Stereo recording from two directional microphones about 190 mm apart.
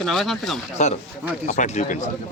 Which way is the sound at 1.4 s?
40° left (ahead or behind).